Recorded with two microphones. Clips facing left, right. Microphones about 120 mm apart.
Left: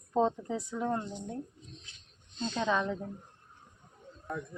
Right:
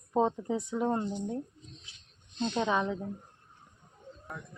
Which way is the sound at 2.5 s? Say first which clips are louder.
Right 1 dB; 15° right (ahead or behind).